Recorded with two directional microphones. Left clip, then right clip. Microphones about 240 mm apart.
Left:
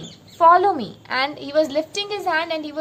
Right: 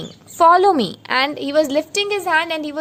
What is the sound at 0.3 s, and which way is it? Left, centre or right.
A woman's voice, right.